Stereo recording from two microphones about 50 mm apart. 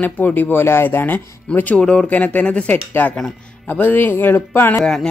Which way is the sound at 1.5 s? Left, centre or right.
Left.